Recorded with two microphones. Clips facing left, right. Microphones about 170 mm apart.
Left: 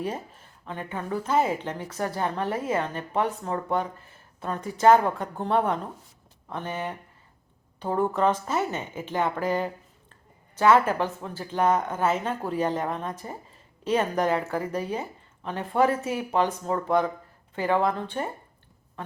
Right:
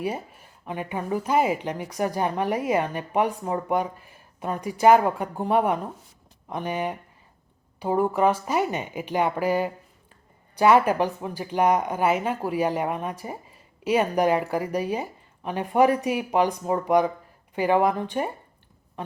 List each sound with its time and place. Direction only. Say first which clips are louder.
0.0 s speech: right 2 dB; 10° right (ahead or behind)